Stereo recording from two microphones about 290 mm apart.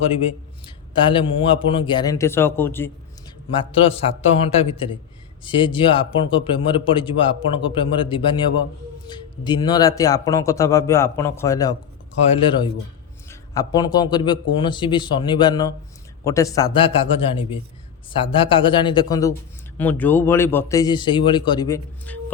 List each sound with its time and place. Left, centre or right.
0.9 s a man's voice: centre